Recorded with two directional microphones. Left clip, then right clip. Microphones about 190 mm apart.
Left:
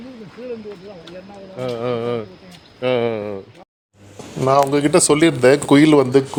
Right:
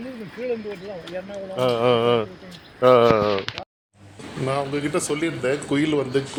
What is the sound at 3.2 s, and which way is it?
Speech, centre (ahead or behind).